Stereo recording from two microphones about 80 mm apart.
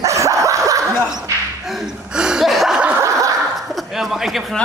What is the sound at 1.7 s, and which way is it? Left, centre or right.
Chuckle, centre.